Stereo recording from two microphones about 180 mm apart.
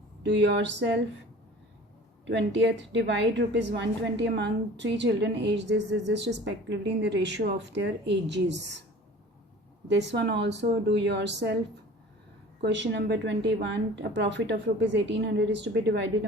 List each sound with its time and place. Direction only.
0.2 s a woman's voice: 80° right
2.2 s a woman's voice: 80° right
9.9 s a woman's voice: 75° right (ahead or behind)
12.6 s a woman's voice: 75° right (ahead or behind)